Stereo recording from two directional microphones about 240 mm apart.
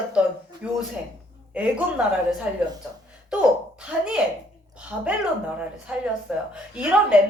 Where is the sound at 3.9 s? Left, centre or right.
Centre.